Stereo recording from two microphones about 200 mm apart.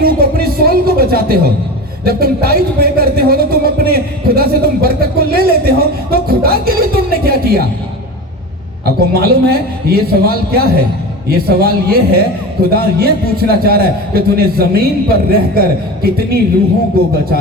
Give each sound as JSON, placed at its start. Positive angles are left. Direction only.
{"t": 0.0, "sound": "a sound", "side_deg": -50}
{"t": 2.0, "sound": "a man's voice", "side_deg": -50}
{"t": 8.8, "sound": "a man's voice", "side_deg": -50}